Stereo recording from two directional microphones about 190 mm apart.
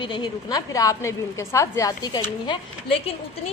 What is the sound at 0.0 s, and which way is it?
A woman's voice, 25° left (ahead or behind).